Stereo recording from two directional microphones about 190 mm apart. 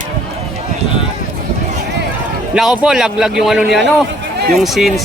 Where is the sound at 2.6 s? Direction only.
5° right (ahead or behind).